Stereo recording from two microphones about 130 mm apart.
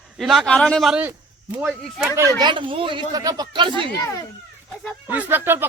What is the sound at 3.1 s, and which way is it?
Speech, 30° right (ahead or behind).